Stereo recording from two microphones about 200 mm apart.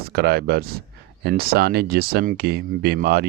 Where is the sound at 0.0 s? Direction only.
50° right (ahead or behind).